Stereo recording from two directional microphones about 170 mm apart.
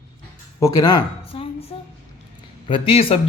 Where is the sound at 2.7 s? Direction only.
30° left (ahead or behind).